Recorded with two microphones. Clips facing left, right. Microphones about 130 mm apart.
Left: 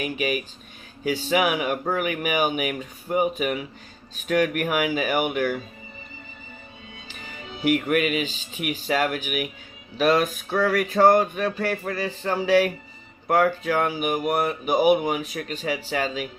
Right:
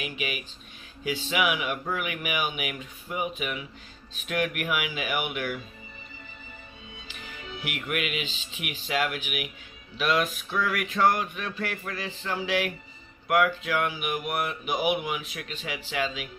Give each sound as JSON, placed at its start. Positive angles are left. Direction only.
{"t": 0.0, "sound": "speech", "side_deg": 40}
{"t": 7.7, "sound": "speech", "side_deg": 40}